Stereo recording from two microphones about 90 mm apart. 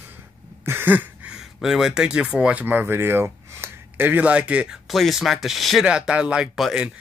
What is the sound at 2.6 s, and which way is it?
Speech, 25° right (ahead or behind).